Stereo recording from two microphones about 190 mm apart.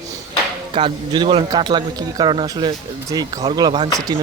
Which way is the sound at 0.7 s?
25° right (ahead or behind).